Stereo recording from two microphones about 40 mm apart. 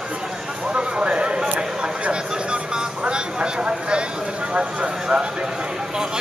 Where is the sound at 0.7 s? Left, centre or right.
Right.